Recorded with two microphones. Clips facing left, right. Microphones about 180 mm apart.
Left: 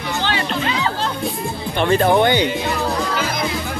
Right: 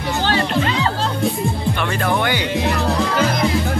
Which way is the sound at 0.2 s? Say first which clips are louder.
Right 4 dB; 40° right (ahead or behind).